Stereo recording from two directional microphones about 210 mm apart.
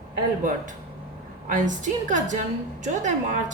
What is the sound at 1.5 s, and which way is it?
A woman's voice, 35° right (ahead or behind).